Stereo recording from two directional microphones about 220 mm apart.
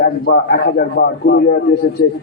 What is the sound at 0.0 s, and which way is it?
A man's voice, 45° left (ahead or behind).